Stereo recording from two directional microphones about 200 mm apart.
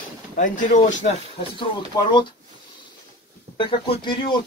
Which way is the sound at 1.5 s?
25° left (ahead or behind).